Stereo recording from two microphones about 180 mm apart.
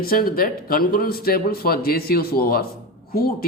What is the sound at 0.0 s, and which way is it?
A man's voice, 55° left (ahead or behind).